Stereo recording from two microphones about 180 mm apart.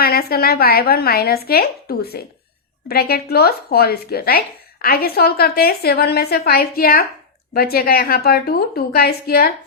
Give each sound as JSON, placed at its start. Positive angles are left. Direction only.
{"t": 0.0, "sound": "speech", "side_deg": 55}